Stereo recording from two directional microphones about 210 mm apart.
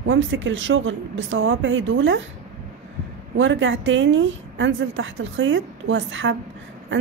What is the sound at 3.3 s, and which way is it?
Speech, 60° right (ahead or behind).